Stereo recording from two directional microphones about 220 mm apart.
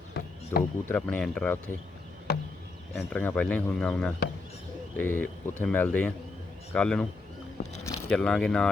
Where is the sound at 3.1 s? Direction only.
5° left (ahead or behind).